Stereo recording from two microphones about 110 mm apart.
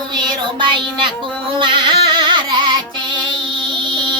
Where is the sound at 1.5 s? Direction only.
50° right (ahead or behind).